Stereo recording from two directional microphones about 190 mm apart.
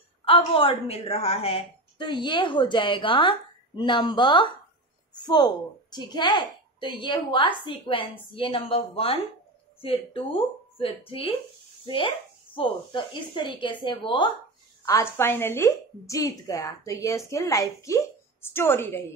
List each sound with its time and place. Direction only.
0.2 s a woman's voice: 30° left (ahead or behind)
14.9 s a woman's voice: 15° left (ahead or behind)